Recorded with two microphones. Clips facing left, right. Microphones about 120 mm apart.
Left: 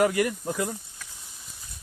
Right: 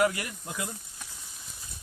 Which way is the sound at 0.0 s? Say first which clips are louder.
Left 5 dB; 45° left (ahead or behind).